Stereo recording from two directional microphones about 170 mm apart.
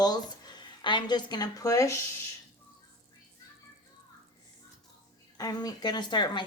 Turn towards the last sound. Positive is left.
turn(degrees=25)  # may be behind; listen again after turning